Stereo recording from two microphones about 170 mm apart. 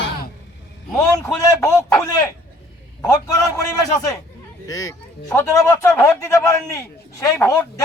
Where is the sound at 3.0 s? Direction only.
20° left (ahead or behind).